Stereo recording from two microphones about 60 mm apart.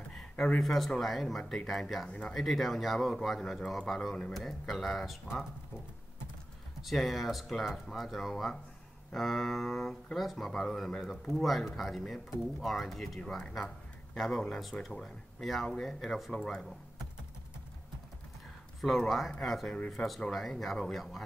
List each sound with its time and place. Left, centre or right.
0.1 s speech: centre
2.0 s speech: centre
2.3 s speech: centre
6.8 s speech: centre
18.8 s speech: centre